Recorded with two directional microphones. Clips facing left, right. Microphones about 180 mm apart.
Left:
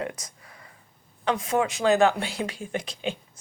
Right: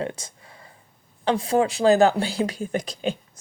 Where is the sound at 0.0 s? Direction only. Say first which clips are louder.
Right 3 dB; 30° right (ahead or behind).